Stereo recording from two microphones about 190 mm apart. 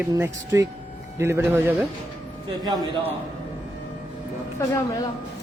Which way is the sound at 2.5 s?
20° right (ahead or behind).